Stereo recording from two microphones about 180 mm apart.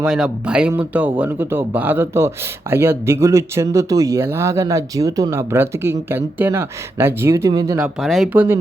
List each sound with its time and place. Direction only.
0.0 s speech: 5° right (ahead or behind); by 7.8 s 20° right (ahead or behind)
7.8 s speech: centre (ahead or behind)